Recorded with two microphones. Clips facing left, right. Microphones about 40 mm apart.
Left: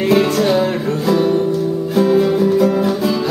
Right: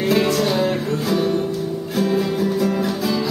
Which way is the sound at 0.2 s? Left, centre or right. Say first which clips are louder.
Left 4 dB; centre.